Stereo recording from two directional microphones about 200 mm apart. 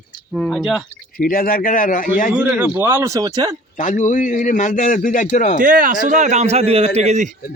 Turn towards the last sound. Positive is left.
turn(degrees=-35)  # may be behind; listen again after turning